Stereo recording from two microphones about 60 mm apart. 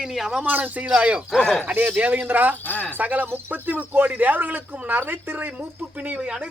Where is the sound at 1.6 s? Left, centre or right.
Right.